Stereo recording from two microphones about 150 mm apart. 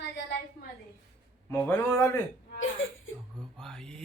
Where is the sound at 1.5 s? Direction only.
15° left (ahead or behind).